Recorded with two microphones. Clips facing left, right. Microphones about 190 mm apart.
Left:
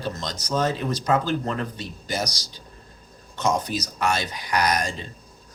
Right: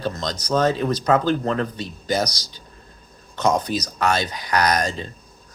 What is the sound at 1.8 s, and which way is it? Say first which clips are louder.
Speech: right 6 dB; 40° right (ahead or behind).